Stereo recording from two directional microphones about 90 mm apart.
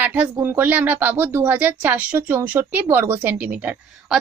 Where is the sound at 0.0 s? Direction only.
15° right (ahead or behind).